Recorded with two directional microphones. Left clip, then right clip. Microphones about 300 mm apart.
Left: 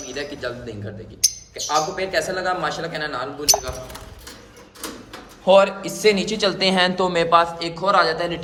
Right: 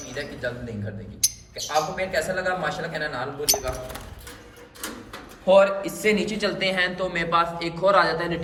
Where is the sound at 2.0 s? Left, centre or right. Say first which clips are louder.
Left 2 dB; centre.